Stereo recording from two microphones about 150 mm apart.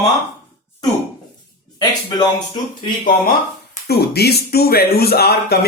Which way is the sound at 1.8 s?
30° left (ahead or behind).